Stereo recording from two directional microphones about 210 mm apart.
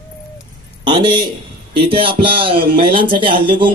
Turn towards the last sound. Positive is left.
turn(degrees=-25)  # may be behind; listen again after turning